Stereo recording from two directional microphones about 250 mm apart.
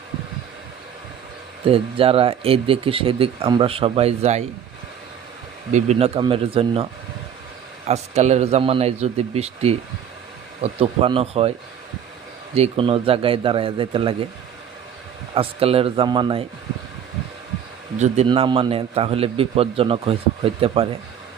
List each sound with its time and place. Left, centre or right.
1.6 s a man's voice: right
5.7 s a man's voice: right
7.9 s a man's voice: right
12.5 s a man's voice: right
15.4 s a man's voice: right
17.9 s a man's voice: right